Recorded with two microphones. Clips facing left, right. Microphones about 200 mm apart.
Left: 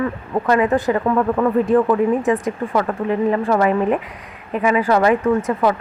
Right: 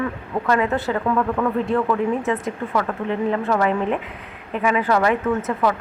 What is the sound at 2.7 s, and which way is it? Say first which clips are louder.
Speech: left 3 dB; 30° left (ahead or behind).